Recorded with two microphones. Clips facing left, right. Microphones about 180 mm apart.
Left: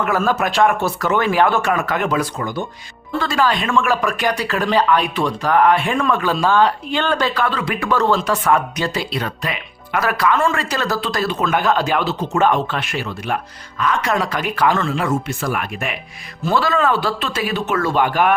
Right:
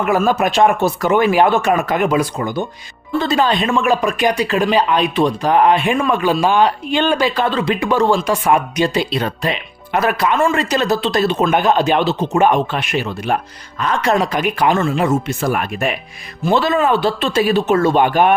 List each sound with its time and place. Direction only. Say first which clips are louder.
0.0 s speech: right 3 dB; 15° right (ahead or behind)
7.4 s speech: right 4 dB; 25° right (ahead or behind)
14.3 s speech: right 2 dB; 15° right (ahead or behind); by 16.0 s 35° right (ahead or behind)
16.4 s speech: right 3 dB; 20° right (ahead or behind)